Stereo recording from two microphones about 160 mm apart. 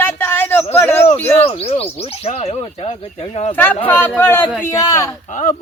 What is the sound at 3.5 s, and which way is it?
Speech, 10° left (ahead or behind).